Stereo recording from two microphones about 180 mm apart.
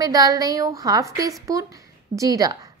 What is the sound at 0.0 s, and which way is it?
A woman's voice, 20° right (ahead or behind).